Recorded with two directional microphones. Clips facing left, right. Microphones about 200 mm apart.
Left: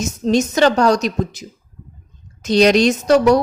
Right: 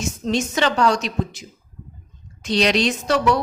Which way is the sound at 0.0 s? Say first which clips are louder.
Left 6 dB; 40° left (ahead or behind).